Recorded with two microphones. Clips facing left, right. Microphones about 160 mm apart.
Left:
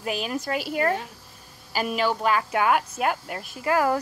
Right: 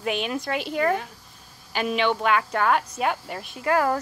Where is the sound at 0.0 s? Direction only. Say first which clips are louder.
Right 1 dB; 5° left (ahead or behind).